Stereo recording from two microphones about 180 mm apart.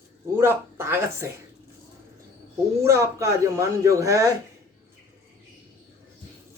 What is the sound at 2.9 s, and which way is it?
Speech, 15° right (ahead or behind).